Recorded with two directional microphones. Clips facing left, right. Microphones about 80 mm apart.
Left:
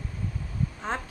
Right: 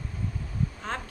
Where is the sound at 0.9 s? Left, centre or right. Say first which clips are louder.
Left 5 dB; left.